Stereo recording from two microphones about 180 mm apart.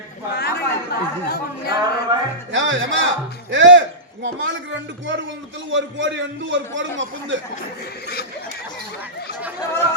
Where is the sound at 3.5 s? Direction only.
90° right.